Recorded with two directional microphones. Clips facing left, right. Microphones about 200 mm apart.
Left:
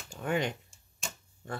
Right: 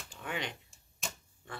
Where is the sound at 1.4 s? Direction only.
45° left (ahead or behind).